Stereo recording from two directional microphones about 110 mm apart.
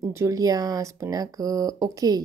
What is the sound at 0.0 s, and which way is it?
Speech, 25° right (ahead or behind).